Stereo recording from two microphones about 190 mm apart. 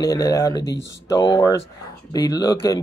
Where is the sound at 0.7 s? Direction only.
70° left (ahead or behind).